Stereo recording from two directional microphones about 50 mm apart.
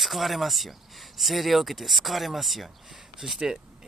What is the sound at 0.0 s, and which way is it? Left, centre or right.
Speech, centre.